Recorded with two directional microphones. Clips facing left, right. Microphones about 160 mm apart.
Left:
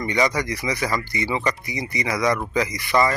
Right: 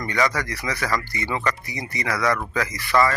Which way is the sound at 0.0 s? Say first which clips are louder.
Left 2 dB; 15° left (ahead or behind).